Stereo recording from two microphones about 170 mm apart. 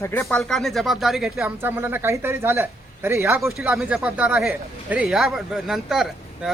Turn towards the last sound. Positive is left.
turn(degrees=0)  # may be behind; listen again after turning